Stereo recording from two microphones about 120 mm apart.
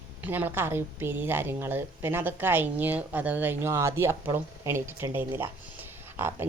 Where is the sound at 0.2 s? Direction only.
15° right (ahead or behind).